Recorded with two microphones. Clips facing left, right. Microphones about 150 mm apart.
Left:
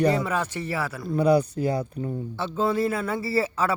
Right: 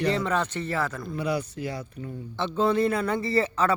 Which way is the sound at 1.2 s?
35° left (ahead or behind).